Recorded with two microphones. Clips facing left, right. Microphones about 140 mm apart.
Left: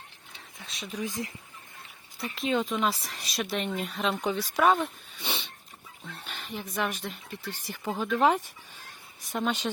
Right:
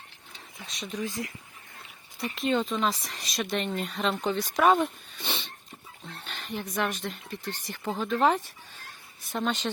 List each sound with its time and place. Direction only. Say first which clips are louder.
0.6 s speech: right 2 dB; centre (ahead or behind)
1.0 s speech: left 1 dB; 20° left (ahead or behind)
2.2 s speech: right 1 dB; centre (ahead or behind)